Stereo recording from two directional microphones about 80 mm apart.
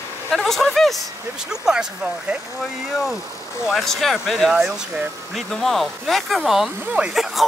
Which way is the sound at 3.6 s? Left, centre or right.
Centre.